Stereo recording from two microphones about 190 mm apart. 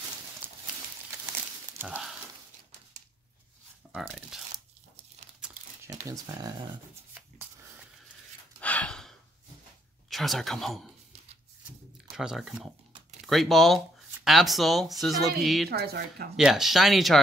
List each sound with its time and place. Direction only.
0.4 s a sound: 10° right (ahead or behind)
1.8 s speech: 5° right (ahead or behind)
3.9 s speech: 5° right (ahead or behind)
5.4 s crumpling: 5° right (ahead or behind)
5.9 s speech: 15° right (ahead or behind)
8.5 s gasp: 5° left (ahead or behind)
10.0 s speech: centre (ahead or behind)
12.2 s speech: centre (ahead or behind)
15.7 s speech: 55° right (ahead or behind)
16.3 s speech: centre (ahead or behind)